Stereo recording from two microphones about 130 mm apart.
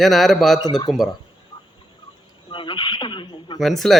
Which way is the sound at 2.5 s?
40° left (ahead or behind).